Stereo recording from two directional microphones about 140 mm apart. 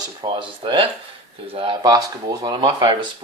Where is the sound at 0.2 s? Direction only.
35° right (ahead or behind).